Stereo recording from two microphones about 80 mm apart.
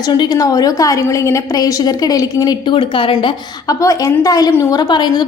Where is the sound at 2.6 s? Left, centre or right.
Left.